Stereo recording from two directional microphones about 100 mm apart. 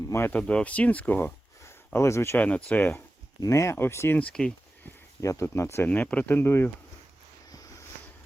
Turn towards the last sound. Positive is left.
turn(degrees=35)  # may be behind; listen again after turning